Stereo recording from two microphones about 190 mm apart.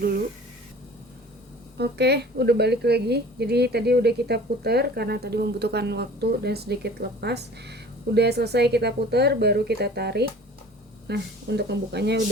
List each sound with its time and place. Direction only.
1.8 s a woman's voice: 60° right (ahead or behind)